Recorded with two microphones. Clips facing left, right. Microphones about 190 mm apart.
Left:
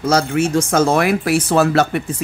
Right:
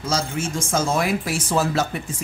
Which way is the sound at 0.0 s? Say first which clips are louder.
Left 9 dB; 65° left (ahead or behind).